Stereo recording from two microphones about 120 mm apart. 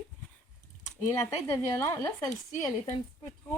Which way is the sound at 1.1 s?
20° left (ahead or behind).